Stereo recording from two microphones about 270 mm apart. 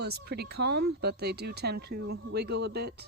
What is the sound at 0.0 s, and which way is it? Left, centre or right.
Speech, right.